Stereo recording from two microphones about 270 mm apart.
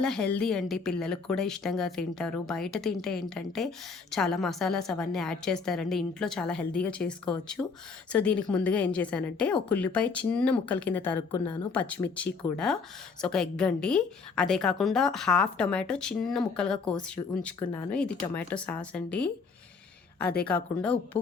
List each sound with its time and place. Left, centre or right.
0.0 s a woman's voice: centre
20.8 s a woman's voice: centre